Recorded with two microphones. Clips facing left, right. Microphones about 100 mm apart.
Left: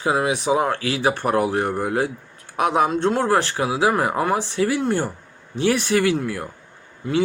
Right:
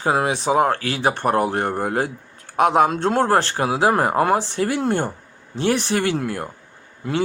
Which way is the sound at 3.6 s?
45° right (ahead or behind).